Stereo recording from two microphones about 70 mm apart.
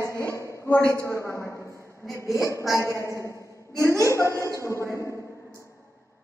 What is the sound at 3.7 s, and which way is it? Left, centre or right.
Speech, right.